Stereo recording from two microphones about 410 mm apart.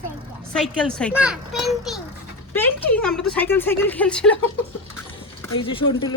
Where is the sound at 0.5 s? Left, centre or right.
Centre.